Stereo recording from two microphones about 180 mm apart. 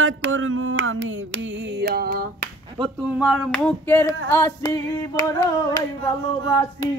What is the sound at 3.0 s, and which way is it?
Speech, 5° right (ahead or behind).